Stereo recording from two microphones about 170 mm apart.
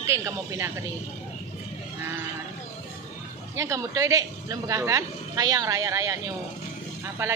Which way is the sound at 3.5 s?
15° right (ahead or behind).